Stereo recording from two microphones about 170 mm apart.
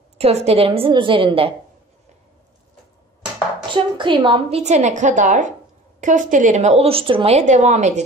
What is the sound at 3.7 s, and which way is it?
Speech, 30° right (ahead or behind).